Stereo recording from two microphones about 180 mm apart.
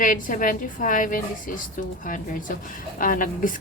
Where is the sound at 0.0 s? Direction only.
45° left (ahead or behind).